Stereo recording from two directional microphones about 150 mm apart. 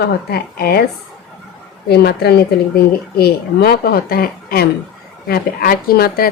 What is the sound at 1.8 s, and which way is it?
Speech, 90° left.